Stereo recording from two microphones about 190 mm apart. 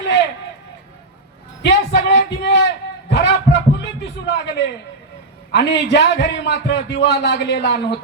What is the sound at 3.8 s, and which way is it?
A man's voice, 65° left (ahead or behind).